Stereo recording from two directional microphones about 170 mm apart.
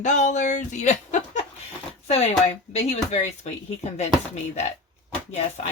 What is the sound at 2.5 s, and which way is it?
Speech, 40° left (ahead or behind).